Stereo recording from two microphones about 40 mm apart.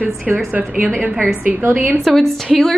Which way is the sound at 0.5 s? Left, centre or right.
Right.